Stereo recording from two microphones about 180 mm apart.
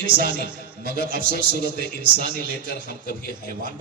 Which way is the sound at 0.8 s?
50° right (ahead or behind).